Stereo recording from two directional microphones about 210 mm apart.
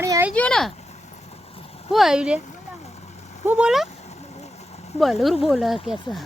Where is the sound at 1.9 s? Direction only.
Centre (ahead or behind).